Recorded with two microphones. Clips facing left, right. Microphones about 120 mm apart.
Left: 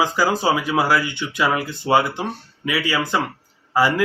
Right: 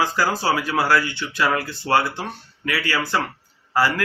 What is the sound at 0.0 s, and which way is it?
A man's voice, 20° left (ahead or behind).